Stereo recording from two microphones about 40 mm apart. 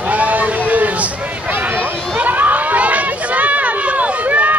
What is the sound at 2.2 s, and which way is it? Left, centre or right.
Run, right.